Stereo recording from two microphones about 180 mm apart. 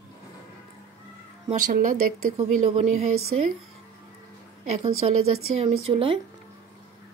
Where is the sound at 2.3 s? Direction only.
35° right (ahead or behind).